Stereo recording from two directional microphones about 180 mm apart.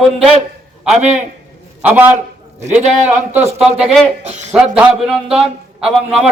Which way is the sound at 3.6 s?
5° right (ahead or behind).